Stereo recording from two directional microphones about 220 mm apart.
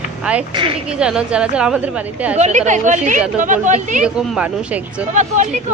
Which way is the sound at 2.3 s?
30° right (ahead or behind).